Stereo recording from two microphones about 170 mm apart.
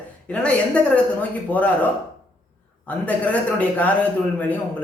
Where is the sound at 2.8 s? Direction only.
10° left (ahead or behind).